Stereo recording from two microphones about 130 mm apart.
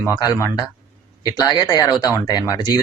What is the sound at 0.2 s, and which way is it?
Speech, 25° left (ahead or behind).